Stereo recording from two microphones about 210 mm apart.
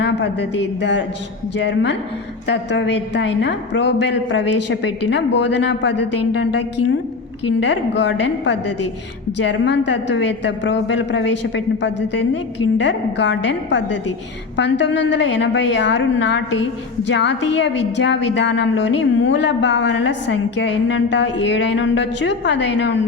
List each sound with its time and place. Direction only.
0.0 s a woman's voice: 55° left (ahead or behind)